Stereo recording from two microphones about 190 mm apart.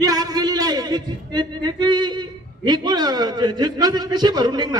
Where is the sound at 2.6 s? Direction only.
20° right (ahead or behind).